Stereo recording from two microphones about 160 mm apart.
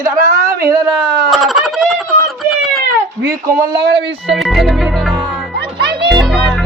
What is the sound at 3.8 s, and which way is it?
Speech, 90° right.